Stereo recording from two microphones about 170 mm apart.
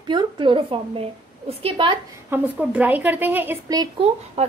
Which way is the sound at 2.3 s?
10° right (ahead or behind).